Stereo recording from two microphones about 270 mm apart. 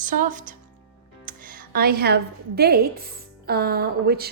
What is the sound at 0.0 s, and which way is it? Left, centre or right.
A woman's voice, right.